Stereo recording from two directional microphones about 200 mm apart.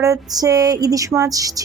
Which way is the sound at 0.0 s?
15° right (ahead or behind).